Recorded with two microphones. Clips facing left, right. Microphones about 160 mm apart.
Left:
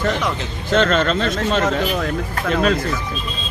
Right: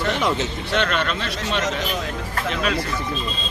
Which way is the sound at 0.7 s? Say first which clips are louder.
Left 8 dB; 40° left (ahead or behind).